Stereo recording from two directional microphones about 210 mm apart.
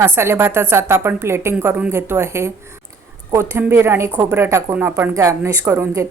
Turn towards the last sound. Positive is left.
turn(degrees=-15)  # may be behind; listen again after turning